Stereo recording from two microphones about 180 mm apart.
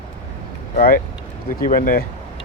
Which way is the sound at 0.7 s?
50° left (ahead or behind).